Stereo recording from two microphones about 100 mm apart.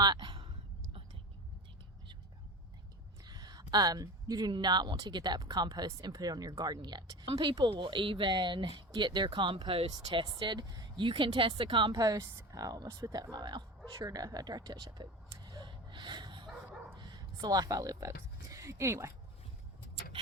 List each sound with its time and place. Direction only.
0.0 s a sound: 45° right (ahead or behind)
3.2 s a sound: 45° right (ahead or behind)
4.5 s speech: 45° right (ahead or behind)
7.3 s speech: 65° right (ahead or behind)
9.9 s speech: 45° right (ahead or behind)
11.0 s speech: 55° right (ahead or behind)
15.4 s bow-wow: 45° right (ahead or behind)
17.0 s speech: 45° right (ahead or behind); by 19.1 s 30° right (ahead or behind)